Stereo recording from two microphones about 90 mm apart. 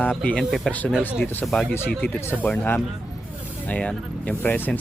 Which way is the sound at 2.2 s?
25° left (ahead or behind).